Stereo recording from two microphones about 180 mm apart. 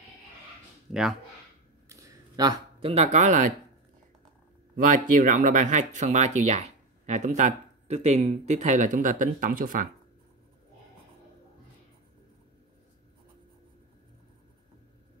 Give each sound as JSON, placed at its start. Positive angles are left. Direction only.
{"t": 1.9, "sound": "speech", "side_deg": -15}
{"t": 4.7, "sound": "speech", "side_deg": -45}